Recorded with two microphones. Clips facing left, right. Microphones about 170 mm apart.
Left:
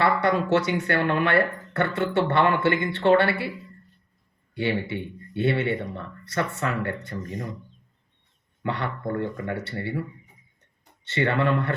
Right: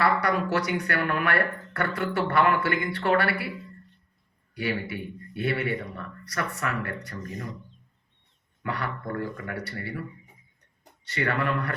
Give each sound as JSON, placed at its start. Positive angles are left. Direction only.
{"t": 0.0, "sound": "speech", "side_deg": 25}
{"t": 4.5, "sound": "speech", "side_deg": 25}
{"t": 8.6, "sound": "speech", "side_deg": 25}